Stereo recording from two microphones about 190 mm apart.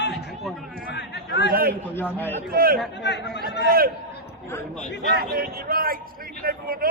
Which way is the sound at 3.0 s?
60° left (ahead or behind).